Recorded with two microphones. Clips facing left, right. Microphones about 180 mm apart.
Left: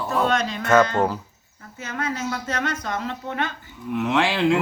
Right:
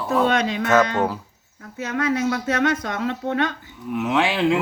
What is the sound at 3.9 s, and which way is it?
Speech, centre (ahead or behind).